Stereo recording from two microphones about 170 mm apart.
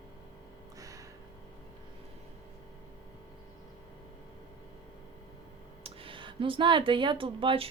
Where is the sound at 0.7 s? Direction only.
20° right (ahead or behind).